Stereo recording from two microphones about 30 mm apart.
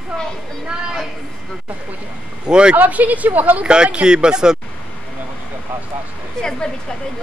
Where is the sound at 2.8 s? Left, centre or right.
Right.